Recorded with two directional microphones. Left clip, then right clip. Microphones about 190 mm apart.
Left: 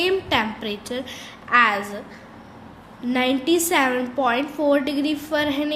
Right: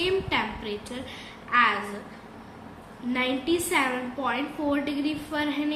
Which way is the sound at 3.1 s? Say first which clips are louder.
Left 6 dB; 65° left (ahead or behind).